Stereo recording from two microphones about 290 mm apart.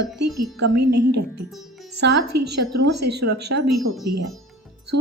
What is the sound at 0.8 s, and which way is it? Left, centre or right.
A woman's voice, right.